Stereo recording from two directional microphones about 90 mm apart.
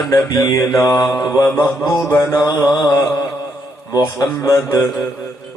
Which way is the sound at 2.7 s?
45° left (ahead or behind).